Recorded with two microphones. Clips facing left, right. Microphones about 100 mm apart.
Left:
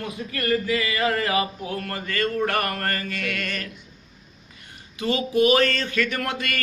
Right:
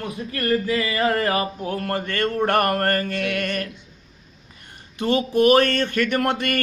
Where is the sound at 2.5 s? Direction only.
50° right (ahead or behind).